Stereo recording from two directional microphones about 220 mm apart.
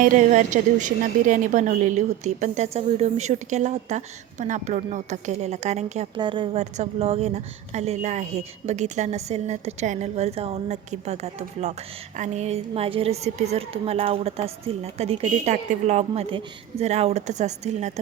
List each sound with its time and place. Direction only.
0.0 s a woman's voice: 35° right (ahead or behind)